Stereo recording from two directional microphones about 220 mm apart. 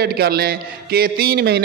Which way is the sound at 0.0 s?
45° right (ahead or behind).